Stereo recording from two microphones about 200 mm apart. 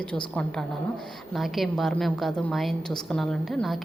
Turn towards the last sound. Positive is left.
turn(degrees=0)  # may be behind; listen again after turning